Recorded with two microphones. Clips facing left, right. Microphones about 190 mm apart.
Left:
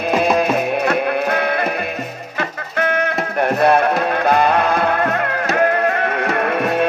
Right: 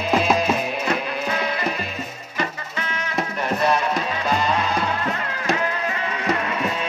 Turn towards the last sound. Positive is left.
turn(degrees=60)  # may be behind; listen again after turning